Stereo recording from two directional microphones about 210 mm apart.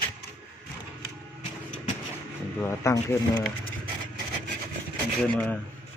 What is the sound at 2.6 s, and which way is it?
Speech, 15° left (ahead or behind).